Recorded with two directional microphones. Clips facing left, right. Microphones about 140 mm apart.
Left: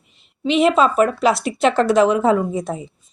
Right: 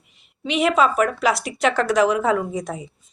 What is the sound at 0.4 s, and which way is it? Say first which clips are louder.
Speech: left 3 dB; 25° left (ahead or behind).